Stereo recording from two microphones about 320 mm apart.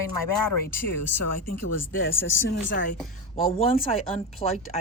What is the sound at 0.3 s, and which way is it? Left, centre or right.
Speech, left.